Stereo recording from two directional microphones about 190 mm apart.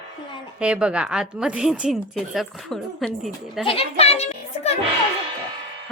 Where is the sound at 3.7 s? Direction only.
30° left (ahead or behind).